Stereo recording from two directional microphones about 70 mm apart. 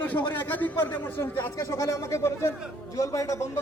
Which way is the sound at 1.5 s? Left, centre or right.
Left.